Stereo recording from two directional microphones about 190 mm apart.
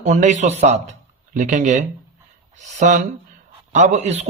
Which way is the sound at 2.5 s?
40° right (ahead or behind).